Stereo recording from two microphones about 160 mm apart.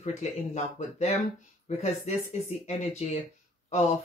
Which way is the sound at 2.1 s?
45° left (ahead or behind).